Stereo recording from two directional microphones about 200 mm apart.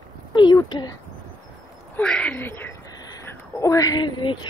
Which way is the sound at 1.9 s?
5° left (ahead or behind).